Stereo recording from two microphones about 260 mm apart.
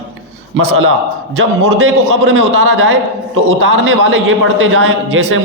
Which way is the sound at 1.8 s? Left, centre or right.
Right.